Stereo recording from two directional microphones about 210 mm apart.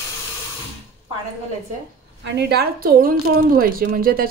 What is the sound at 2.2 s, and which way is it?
A woman's voice, 50° right (ahead or behind).